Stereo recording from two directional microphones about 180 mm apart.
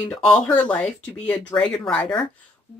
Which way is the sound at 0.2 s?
5° left (ahead or behind).